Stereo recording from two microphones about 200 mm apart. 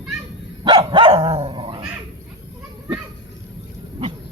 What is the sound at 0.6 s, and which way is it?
Dog, 25° right (ahead or behind).